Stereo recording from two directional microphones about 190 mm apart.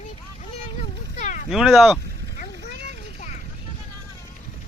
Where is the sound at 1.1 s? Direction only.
40° left (ahead or behind).